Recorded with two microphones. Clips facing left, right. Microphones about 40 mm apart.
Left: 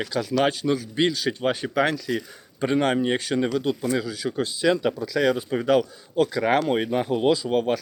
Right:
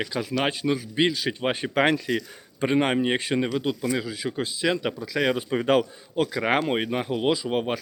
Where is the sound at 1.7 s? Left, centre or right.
Right.